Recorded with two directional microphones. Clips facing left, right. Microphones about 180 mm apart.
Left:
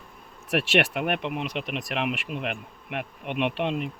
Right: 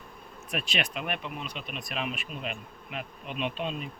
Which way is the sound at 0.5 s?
80° left.